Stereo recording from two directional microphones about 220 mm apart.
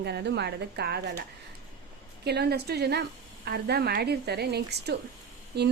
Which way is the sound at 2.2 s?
45° right (ahead or behind).